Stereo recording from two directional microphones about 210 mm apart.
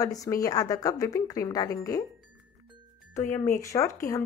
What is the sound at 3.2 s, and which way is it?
Speech, 10° left (ahead or behind).